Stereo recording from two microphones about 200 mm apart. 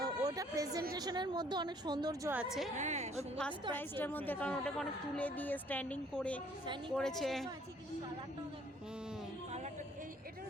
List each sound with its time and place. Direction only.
0.0 s a sound: 20° right (ahead or behind)
0.9 s a woman's voice: 20° right (ahead or behind)
2.3 s a woman's voice: 5° right (ahead or behind)
2.7 s a woman's voice: 35° right (ahead or behind)
3.8 s a woman's voice: 10° left (ahead or behind)